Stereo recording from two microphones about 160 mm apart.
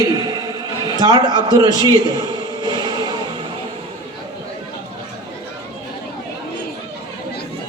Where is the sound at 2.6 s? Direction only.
25° right (ahead or behind).